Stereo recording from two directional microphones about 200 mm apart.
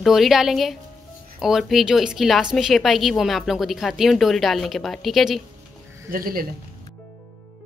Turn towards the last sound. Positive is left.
turn(degrees=-45)  # may be behind; listen again after turning